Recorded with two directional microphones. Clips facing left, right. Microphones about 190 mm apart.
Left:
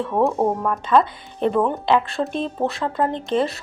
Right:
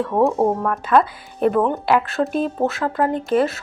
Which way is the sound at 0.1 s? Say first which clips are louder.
Right 1 dB; 5° right (ahead or behind).